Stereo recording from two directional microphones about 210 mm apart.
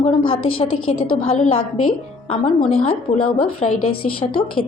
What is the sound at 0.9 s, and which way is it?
Speech, 30° left (ahead or behind).